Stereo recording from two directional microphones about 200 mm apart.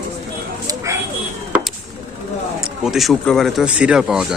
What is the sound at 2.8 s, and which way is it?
Speech, centre (ahead or behind).